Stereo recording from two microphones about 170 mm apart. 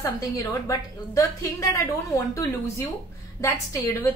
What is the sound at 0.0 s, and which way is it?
A woman's voice, 15° left (ahead or behind).